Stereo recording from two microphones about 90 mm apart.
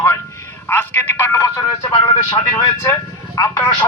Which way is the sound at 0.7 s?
20° left (ahead or behind).